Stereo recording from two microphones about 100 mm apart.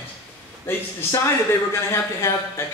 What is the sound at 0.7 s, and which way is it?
A man's voice, 20° left (ahead or behind).